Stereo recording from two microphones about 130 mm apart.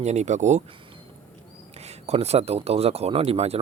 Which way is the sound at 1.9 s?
55° right (ahead or behind).